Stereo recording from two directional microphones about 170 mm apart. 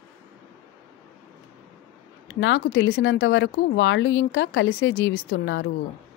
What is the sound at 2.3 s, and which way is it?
A woman's voice, 90° left.